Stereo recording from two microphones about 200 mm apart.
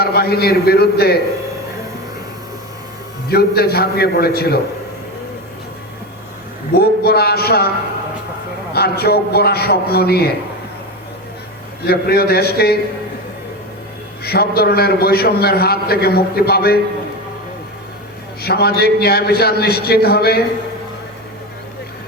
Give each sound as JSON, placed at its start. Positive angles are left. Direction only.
{"t": 0.0, "sound": "a man's voice", "side_deg": 50}
{"t": 3.2, "sound": "a man's voice", "side_deg": 50}
{"t": 6.7, "sound": "a man's voice", "side_deg": 50}
{"t": 8.7, "sound": "a man's voice", "side_deg": 50}
{"t": 11.8, "sound": "a man's voice", "side_deg": 50}
{"t": 14.3, "sound": "a man's voice", "side_deg": 50}
{"t": 18.4, "sound": "a man's voice", "side_deg": 50}